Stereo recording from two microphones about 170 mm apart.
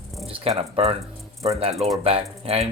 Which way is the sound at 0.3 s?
35° right (ahead or behind).